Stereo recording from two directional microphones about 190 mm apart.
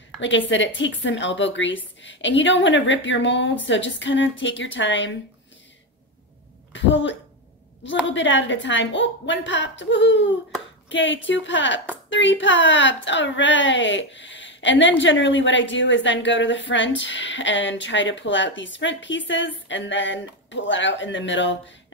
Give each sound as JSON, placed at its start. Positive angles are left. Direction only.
{"t": 0.2, "sound": "a woman's voice", "side_deg": 75}
{"t": 6.7, "sound": "a woman's voice", "side_deg": 70}